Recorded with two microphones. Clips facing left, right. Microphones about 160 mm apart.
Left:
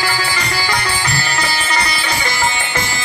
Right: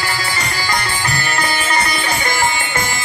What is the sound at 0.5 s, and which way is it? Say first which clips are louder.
Music: left 1 dB; 45° right (ahead or behind).